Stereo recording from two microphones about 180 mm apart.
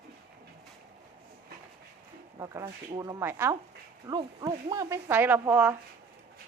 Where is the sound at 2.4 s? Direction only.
15° right (ahead or behind).